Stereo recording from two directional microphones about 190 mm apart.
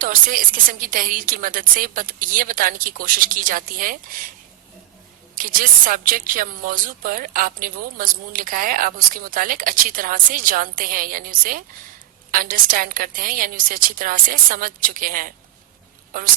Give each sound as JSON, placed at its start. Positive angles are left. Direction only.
{"t": 0.0, "sound": "speech", "side_deg": -45}
{"t": 5.3, "sound": "speech", "side_deg": -45}